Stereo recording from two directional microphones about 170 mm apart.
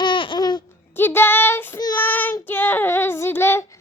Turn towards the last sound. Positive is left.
turn(degrees=15)  # may be behind; listen again after turning